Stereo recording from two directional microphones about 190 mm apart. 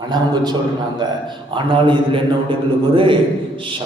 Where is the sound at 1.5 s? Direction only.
25° right (ahead or behind).